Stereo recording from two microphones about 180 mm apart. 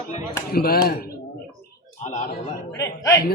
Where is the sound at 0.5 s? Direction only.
55° left (ahead or behind).